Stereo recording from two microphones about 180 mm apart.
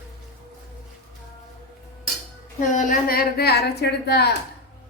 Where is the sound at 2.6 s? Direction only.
50° left (ahead or behind); by 4.3 s 65° left (ahead or behind).